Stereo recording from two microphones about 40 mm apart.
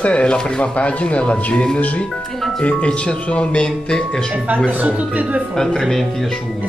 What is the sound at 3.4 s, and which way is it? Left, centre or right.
Music, left.